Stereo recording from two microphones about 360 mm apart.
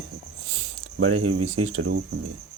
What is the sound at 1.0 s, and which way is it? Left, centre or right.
Speech, right.